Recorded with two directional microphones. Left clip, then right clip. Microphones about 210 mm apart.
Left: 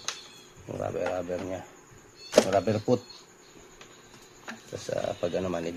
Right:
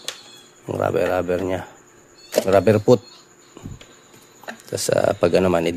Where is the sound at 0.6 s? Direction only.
40° right (ahead or behind).